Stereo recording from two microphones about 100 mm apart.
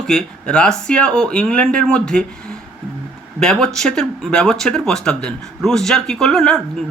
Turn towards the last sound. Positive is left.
turn(degrees=0)  # may be behind; listen again after turning